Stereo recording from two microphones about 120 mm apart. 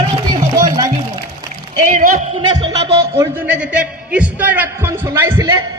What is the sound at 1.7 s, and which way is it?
Speech, 90° right.